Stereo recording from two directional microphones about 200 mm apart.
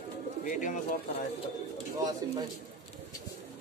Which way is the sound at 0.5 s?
40° left (ahead or behind).